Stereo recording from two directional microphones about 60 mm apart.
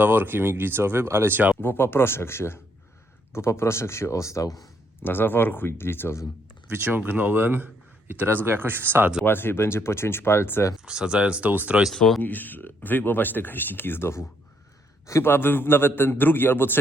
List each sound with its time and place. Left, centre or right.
0.0 s a man's voice: right
1.6 s speech: left
5.0 s speech: left
6.7 s a man's voice: right
9.2 s speech: left
10.8 s speech: centre
12.2 s speech: left